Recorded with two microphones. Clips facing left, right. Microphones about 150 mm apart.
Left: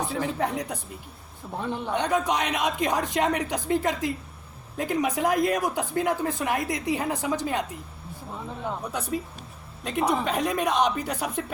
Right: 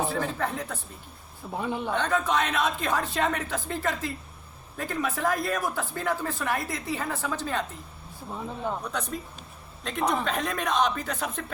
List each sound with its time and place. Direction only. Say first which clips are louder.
0.1 s a woman's voice: left 2 dB; 15° left (ahead or behind)
1.5 s a man's voice: even; 5° right (ahead or behind)
1.9 s a woman's voice: left 2 dB; 15° left (ahead or behind)
8.9 s a woman's voice: left 3 dB; 10° left (ahead or behind)